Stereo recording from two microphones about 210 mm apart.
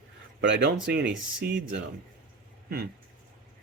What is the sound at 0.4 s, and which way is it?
Speech, 55° right (ahead or behind).